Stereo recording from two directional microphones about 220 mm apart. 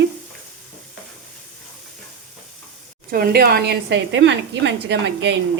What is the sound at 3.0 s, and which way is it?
A woman's voice, 45° right (ahead or behind).